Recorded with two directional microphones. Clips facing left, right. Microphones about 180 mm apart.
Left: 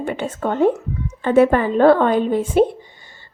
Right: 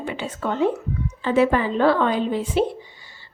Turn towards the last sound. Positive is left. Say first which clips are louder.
# left 6 dB
turn(degrees=50)  # may be behind; listen again after turning